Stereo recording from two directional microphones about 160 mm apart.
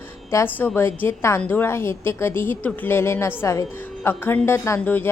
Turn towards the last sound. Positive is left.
turn(degrees=15)  # may be behind; listen again after turning